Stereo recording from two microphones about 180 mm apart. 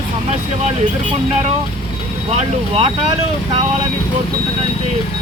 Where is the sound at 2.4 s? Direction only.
35° right (ahead or behind).